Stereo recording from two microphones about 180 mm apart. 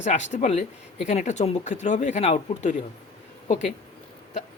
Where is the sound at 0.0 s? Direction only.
40° left (ahead or behind).